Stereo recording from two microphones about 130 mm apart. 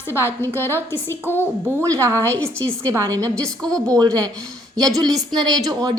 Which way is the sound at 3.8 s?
30° right (ahead or behind).